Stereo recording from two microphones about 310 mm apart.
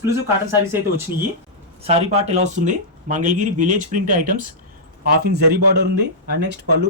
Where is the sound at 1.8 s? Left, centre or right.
Centre.